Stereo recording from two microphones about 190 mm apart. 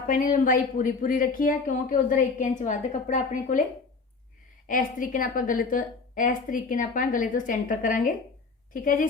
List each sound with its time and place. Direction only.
0.1 s speech: 45° left (ahead or behind)
4.7 s speech: 45° left (ahead or behind)